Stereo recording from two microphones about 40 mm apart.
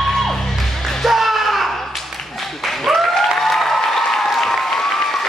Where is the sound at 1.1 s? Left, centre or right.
Centre.